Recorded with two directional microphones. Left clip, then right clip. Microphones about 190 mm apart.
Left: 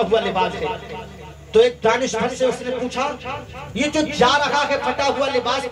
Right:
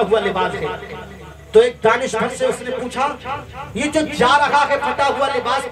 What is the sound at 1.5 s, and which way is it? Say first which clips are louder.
Speech: right 2 dB; 20° right (ahead or behind).